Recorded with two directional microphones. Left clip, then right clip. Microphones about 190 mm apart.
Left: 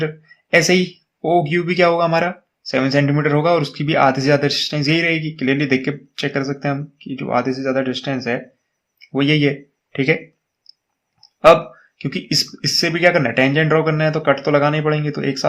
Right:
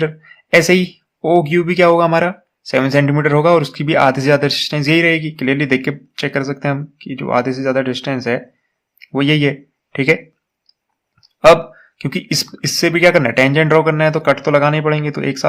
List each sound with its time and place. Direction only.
0.0 s speech: 25° right (ahead or behind)
11.3 s speech: 25° right (ahead or behind)